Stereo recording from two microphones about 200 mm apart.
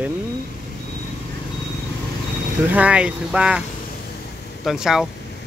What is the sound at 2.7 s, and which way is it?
Speech, 5° right (ahead or behind).